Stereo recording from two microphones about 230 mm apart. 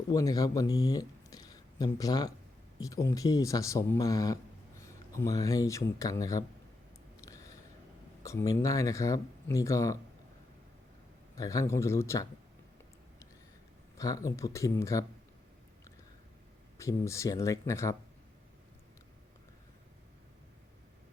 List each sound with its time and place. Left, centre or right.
0.1 s speech: centre
7.2 s a sound: centre
8.2 s speech: centre
11.3 s speech: centre
14.0 s speech: centre
16.7 s speech: centre